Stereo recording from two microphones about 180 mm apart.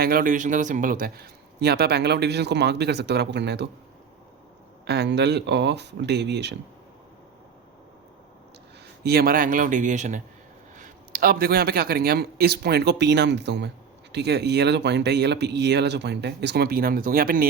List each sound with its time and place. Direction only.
0.0 s speech: 55° right (ahead or behind); by 3.7 s 70° right (ahead or behind)
4.9 s speech: 70° right (ahead or behind)
9.0 s speech: 60° right (ahead or behind)